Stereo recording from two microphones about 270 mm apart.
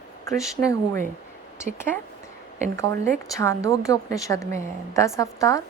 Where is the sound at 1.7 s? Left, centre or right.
Centre.